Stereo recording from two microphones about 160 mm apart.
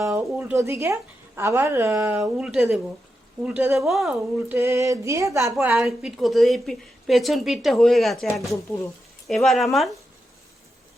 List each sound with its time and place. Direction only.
0.0 s speech: 10° right (ahead or behind)
2.2 s a woman's voice: 5° right (ahead or behind)
3.8 s a woman's voice: centre (ahead or behind)
4.5 s a sound: 20° right (ahead or behind)
5.5 s a woman's voice: centre (ahead or behind)